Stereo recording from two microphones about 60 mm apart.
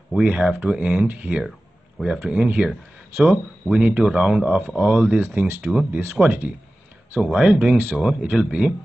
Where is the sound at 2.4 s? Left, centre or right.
Centre.